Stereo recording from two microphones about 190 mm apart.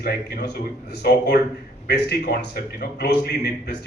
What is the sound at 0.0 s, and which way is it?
A man's voice, 60° left (ahead or behind).